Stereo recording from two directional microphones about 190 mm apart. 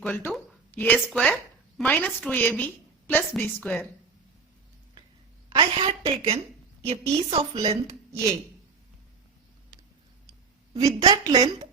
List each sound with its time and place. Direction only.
0.0 s a sound: 10° left (ahead or behind)
0.9 s a woman's voice: 5° left (ahead or behind)
5.5 s a woman's voice: 25° right (ahead or behind)
10.8 s a woman's voice: 20° right (ahead or behind)